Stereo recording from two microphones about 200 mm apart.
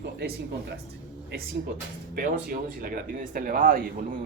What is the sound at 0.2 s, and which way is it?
Speech, 55° right (ahead or behind).